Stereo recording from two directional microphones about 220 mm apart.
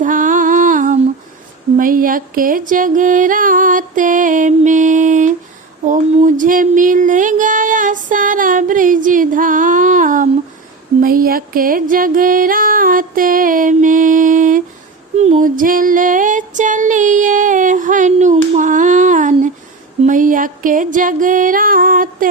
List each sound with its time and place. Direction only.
0.0 s a sound: 35° right (ahead or behind)
1.7 s music: 40° right (ahead or behind)
5.8 s a sound: 35° right (ahead or behind)
11.0 s music: 40° right (ahead or behind)
15.2 s female singing: 35° right (ahead or behind)
20.1 s music: 35° right (ahead or behind)